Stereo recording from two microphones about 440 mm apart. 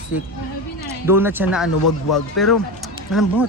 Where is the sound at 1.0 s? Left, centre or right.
Centre.